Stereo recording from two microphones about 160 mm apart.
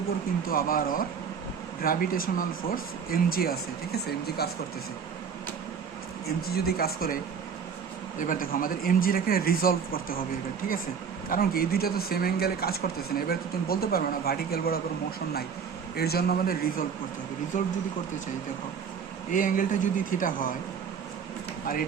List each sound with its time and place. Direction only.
0.4 s speech: 65° left (ahead or behind)
6.2 s speech: 75° left (ahead or behind)
8.3 s speech: 60° left (ahead or behind)
11.3 s speech: 65° left (ahead or behind)
16.0 s speech: 75° left (ahead or behind)
17.5 s speech: 50° left (ahead or behind)
19.3 s speech: 55° left (ahead or behind)